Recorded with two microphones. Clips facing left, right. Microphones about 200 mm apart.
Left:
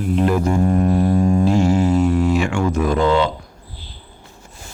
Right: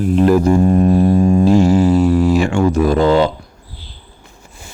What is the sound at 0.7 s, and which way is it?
Didgeridoo, 25° right (ahead or behind).